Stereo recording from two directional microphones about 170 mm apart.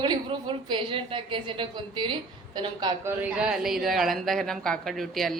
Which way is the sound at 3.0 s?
10° right (ahead or behind).